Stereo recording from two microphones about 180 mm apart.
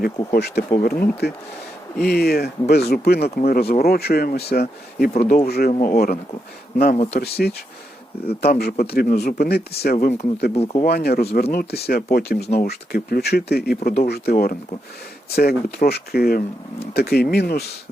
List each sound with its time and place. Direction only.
0.3 s speech: 65° left (ahead or behind)
0.7 s speech: 50° left (ahead or behind)
2.0 s speech: 60° left (ahead or behind)
10.5 s speech: 35° left (ahead or behind)
10.8 s speech: 60° left (ahead or behind)